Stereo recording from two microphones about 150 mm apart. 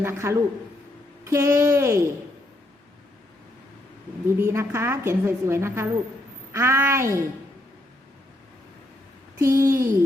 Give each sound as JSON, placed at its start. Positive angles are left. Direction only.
{"t": 0.0, "sound": "a woman's voice", "side_deg": -15}
{"t": 4.4, "sound": "a woman's voice", "side_deg": -15}
{"t": 9.4, "sound": "speech", "side_deg": -20}